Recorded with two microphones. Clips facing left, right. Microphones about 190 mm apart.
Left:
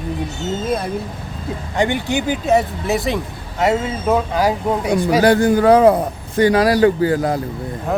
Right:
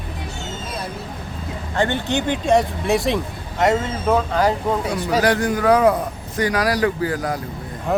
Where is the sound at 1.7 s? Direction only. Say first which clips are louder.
Left 2 dB; 15° left (ahead or behind).